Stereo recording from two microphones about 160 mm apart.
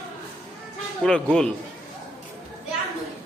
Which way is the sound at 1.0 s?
5° left (ahead or behind).